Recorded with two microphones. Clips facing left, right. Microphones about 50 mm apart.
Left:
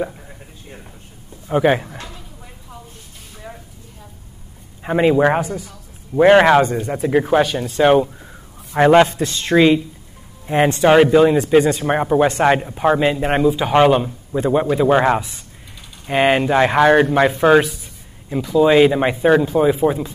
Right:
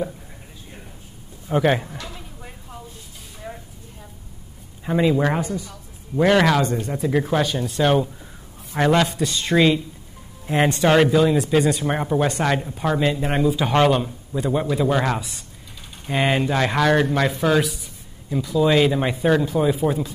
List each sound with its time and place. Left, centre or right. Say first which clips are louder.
1.5 s a man's voice: left 3 dB; centre
3.4 s a sound: right 1 dB; centre
4.8 s a man's voice: left 5 dB; left
10.5 s a man's voice: left 4 dB; centre; by 11.5 s left
11.8 s a man's voice: left 5 dB; left
13.4 s a man's voice: left 4 dB; centre; by 17.6 s left
18.3 s a man's voice: left 5 dB; left